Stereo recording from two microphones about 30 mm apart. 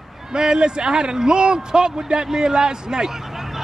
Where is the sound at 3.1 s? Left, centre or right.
Centre.